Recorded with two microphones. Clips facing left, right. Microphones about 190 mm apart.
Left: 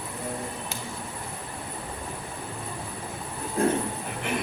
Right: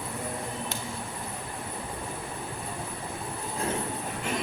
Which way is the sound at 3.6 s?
55° left (ahead or behind).